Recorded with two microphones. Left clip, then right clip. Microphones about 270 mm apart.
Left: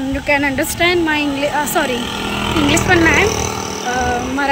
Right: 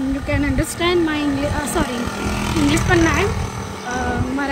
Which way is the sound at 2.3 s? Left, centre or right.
Centre.